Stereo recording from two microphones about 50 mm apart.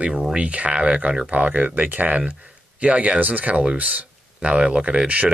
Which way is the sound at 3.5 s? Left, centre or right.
Centre.